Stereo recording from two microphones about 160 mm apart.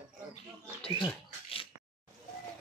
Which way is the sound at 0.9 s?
35° left (ahead or behind).